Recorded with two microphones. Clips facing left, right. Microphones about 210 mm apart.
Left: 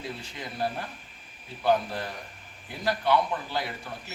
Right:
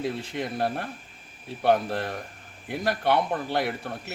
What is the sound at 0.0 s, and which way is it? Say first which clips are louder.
A man's voice: right 8 dB; 55° right (ahead or behind).